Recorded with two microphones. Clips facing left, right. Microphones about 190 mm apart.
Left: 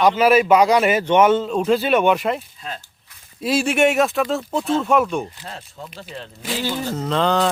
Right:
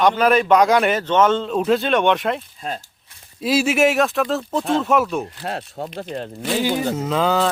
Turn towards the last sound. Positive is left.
turn(degrees=-5)  # may be behind; listen again after turning